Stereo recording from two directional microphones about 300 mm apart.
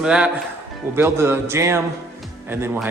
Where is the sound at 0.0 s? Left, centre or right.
Centre.